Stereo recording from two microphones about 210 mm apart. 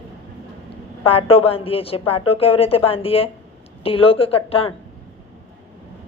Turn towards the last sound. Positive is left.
turn(degrees=25)  # may be behind; listen again after turning